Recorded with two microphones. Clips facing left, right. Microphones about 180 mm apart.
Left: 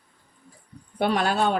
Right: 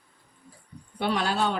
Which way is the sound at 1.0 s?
50° left (ahead or behind).